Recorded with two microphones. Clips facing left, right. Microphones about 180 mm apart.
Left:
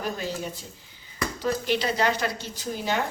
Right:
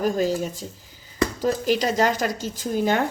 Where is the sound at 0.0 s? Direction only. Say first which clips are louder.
Right 9 dB; 40° right (ahead or behind).